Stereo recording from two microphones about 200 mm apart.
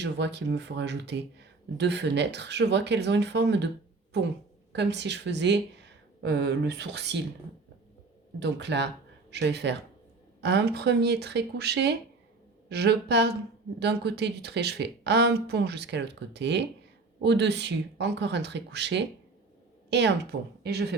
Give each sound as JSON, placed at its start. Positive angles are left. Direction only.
{"t": 0.0, "sound": "speech", "side_deg": -60}
{"t": 4.7, "sound": "speech", "side_deg": -60}
{"t": 8.4, "sound": "speech", "side_deg": -60}